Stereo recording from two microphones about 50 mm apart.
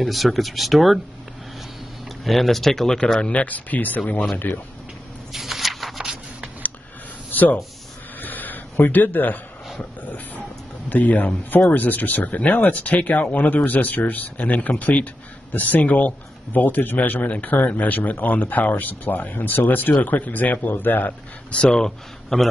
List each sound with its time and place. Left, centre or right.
0.0 s speech: centre
2.2 s speech: centre; by 4.3 s left
5.3 s a sound: centre
7.2 s speech: left
8.2 s a sound: left
9.8 s speech: left
21.5 s speech: left
21.7 s speech: centre